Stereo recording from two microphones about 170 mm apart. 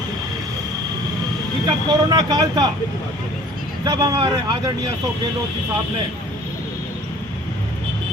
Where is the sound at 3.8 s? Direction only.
25° right (ahead or behind).